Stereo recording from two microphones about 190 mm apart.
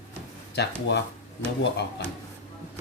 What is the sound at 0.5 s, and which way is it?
Speech, 65° left (ahead or behind).